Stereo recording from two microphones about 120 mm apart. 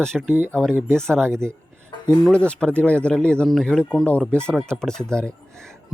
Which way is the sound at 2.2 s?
10° left (ahead or behind).